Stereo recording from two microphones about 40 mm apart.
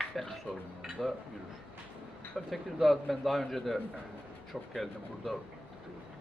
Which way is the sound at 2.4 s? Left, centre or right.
Centre.